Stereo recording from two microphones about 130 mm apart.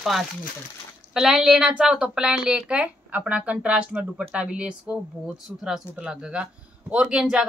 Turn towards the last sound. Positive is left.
turn(degrees=-5)  # may be behind; listen again after turning